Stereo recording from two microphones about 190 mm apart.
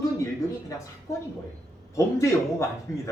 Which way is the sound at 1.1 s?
15° left (ahead or behind).